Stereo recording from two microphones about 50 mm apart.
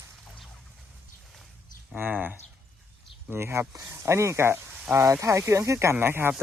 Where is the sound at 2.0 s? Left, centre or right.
Right.